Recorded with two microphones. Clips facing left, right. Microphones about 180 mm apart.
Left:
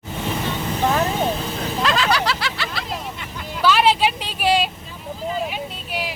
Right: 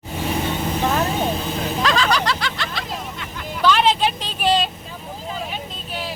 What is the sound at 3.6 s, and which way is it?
Vehicle, 5° left (ahead or behind).